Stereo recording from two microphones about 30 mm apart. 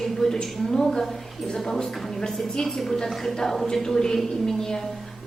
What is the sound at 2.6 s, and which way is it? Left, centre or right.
A woman's voice, centre.